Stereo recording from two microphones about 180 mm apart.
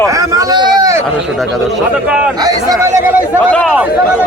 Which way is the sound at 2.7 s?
15° right (ahead or behind).